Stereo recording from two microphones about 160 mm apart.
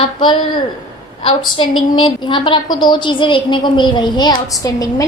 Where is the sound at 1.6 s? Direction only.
30° left (ahead or behind).